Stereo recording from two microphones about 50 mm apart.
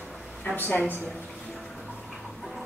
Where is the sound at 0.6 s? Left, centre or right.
Left.